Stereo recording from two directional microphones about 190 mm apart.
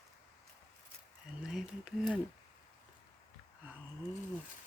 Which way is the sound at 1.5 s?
Centre (ahead or behind).